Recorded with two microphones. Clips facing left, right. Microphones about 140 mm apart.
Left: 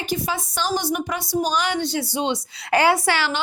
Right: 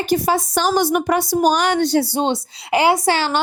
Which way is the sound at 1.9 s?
35° right (ahead or behind).